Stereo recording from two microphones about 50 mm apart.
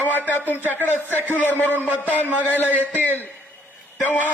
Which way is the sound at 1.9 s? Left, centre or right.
Right.